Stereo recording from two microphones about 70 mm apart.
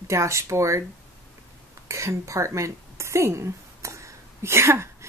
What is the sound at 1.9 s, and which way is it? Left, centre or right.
A woman's voice, right.